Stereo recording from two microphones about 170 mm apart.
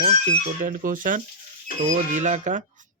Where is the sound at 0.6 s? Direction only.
55° right (ahead or behind).